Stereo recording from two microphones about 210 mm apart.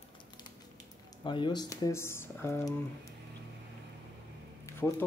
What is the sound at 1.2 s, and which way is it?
Speech, 20° left (ahead or behind).